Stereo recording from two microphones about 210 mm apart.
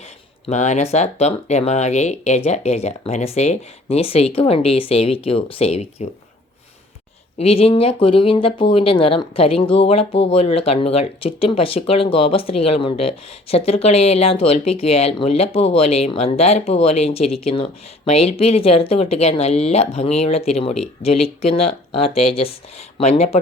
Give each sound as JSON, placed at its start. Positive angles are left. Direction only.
{"t": 0.4, "sound": "speech", "side_deg": 35}
{"t": 7.3, "sound": "speech", "side_deg": 30}